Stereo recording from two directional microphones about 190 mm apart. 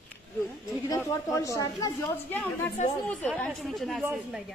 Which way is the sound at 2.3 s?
5° left (ahead or behind).